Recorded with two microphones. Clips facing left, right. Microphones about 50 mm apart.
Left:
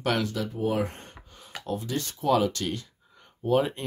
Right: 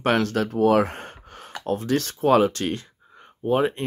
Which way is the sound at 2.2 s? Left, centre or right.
Right.